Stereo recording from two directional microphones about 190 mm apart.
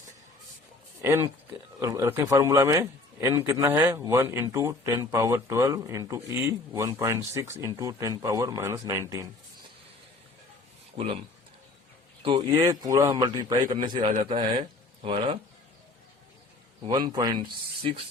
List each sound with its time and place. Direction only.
1.0 s speech: 10° right (ahead or behind)
10.9 s speech: 30° right (ahead or behind)
12.2 s speech: 25° right (ahead or behind)
16.8 s speech: 20° right (ahead or behind)